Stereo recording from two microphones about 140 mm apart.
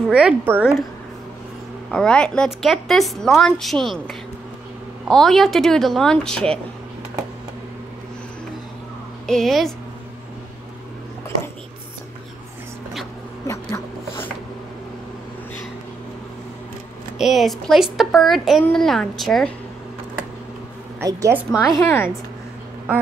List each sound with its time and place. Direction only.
0.1 s a woman's voice: 5° right (ahead or behind)
1.9 s a woman's voice: 5° left (ahead or behind)
9.2 s a woman's voice: 5° left (ahead or behind)
13.5 s rub: 20° left (ahead or behind)
17.2 s a woman's voice: centre (ahead or behind)
21.0 s a woman's voice: 20° right (ahead or behind)
21.7 s a woman's voice: 15° left (ahead or behind)